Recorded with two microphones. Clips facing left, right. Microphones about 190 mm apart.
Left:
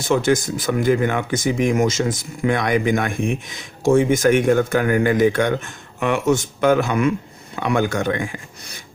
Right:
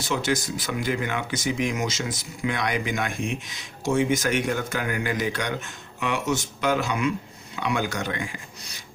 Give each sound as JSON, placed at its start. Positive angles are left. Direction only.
{"t": 0.0, "sound": "speech", "side_deg": 50}